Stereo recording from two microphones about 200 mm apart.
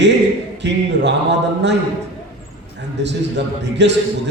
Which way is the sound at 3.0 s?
60° right (ahead or behind).